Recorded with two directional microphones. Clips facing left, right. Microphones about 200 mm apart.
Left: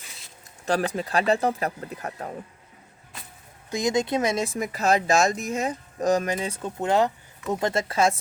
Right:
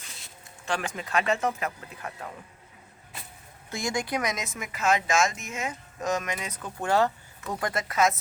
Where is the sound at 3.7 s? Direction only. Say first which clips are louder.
Left 6 dB; 20° left (ahead or behind).